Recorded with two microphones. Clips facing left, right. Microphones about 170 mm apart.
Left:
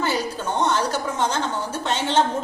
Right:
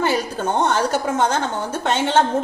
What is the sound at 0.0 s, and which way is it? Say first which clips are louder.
A woman's voice: right 4 dB; 55° right (ahead or behind).